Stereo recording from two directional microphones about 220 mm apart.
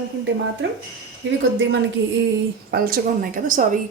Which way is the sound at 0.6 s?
55° right (ahead or behind).